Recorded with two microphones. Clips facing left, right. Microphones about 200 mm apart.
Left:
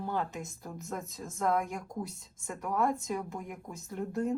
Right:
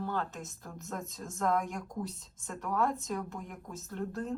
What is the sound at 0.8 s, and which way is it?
Speech, centre (ahead or behind).